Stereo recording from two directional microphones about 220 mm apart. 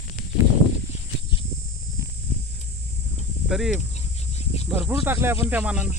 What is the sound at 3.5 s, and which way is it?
Cricket, centre (ahead or behind).